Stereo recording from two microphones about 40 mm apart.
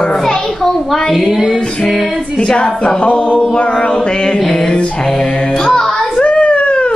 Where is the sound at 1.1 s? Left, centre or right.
Centre.